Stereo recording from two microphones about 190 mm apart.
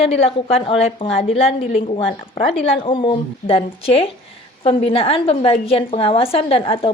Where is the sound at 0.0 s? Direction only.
30° left (ahead or behind).